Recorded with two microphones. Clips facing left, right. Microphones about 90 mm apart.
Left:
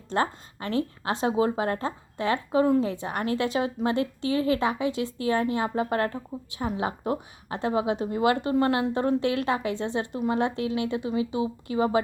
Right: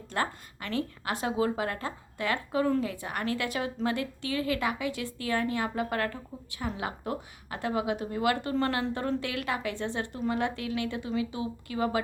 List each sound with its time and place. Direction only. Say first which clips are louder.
0.1 s a woman's voice: left 5 dB; 25° left (ahead or behind)